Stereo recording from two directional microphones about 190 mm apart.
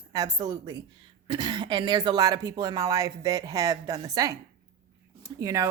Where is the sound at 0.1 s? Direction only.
20° right (ahead or behind).